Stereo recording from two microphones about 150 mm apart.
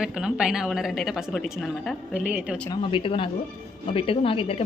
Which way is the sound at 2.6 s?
35° left (ahead or behind).